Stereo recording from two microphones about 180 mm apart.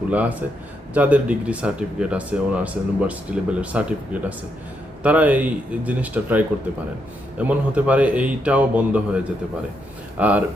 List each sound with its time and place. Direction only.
0.1 s speech: 10° right (ahead or behind)